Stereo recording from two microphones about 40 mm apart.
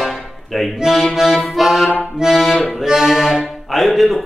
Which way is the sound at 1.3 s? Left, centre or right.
Centre.